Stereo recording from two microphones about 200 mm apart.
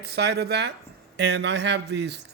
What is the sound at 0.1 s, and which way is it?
A man's voice, 55° right (ahead or behind).